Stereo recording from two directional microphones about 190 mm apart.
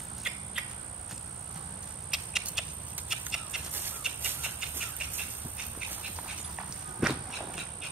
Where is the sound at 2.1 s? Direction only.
5° right (ahead or behind).